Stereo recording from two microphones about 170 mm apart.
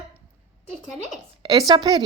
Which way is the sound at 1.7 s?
25° right (ahead or behind).